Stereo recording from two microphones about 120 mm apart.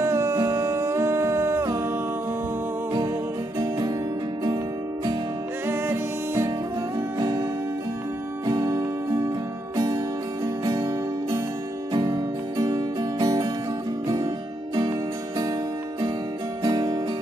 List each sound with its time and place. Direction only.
0.0 s music: 20° right (ahead or behind)
5.7 s music: 20° right (ahead or behind)
8.5 s music: 30° right (ahead or behind)
14.8 s music: 40° right (ahead or behind)
16.6 s music: 35° right (ahead or behind)